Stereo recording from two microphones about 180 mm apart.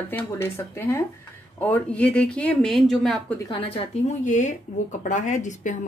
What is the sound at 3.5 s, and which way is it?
Speech, 30° left (ahead or behind).